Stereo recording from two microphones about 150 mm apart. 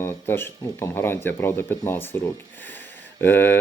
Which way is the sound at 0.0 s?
15° left (ahead or behind).